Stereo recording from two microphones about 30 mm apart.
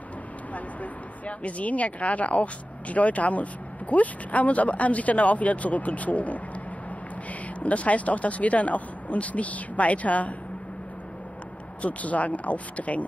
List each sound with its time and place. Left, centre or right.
1.2 s speech: left
7.6 s speech: left
11.8 s speech: left